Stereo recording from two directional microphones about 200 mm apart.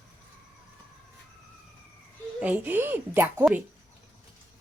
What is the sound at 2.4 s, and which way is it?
A woman's voice, 10° right (ahead or behind).